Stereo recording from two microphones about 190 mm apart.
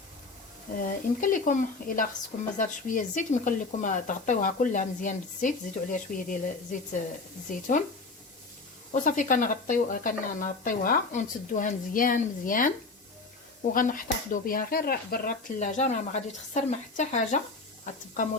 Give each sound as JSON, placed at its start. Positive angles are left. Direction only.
{"t": 0.8, "sound": "speech", "side_deg": 45}
{"t": 8.9, "sound": "speech", "side_deg": 40}